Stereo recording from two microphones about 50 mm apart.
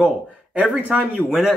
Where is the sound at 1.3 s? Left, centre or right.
Centre.